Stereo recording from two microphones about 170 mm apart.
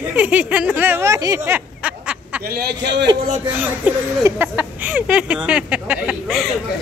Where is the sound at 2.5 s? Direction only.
70° right (ahead or behind); by 3.0 s 90° right.